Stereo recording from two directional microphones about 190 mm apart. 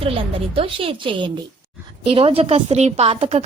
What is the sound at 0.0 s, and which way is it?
A woman's voice, 30° right (ahead or behind).